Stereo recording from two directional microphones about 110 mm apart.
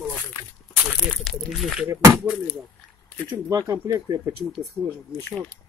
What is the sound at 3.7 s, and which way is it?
Speech, 35° right (ahead or behind).